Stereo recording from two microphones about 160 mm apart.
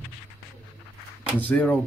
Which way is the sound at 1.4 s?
10° left (ahead or behind).